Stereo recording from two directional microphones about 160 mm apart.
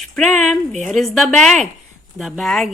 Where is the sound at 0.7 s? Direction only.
45° right (ahead or behind).